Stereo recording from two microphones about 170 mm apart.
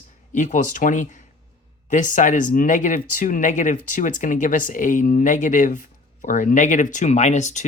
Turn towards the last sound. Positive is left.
turn(degrees=45)  # may be behind; listen again after turning